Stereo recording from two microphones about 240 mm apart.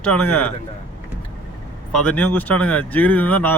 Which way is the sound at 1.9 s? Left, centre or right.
Centre.